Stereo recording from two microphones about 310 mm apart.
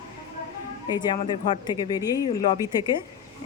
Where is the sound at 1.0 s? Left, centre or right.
Centre.